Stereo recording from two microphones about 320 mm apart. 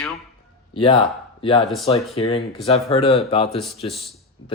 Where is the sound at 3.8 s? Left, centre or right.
Centre.